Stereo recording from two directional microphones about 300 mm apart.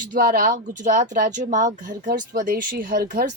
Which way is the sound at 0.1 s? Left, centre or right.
Right.